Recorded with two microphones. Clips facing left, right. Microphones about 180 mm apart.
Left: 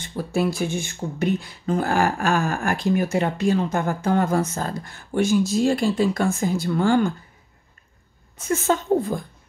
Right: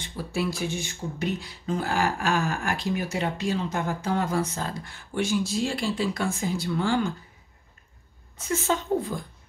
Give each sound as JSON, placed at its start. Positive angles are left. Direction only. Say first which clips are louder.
{"t": 0.0, "sound": "speech", "louder": "left 6 dB", "side_deg": 45}
{"t": 8.5, "sound": "speech", "louder": "left 5 dB", "side_deg": 50}